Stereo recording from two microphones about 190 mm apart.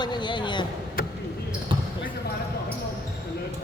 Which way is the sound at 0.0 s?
25° left (ahead or behind).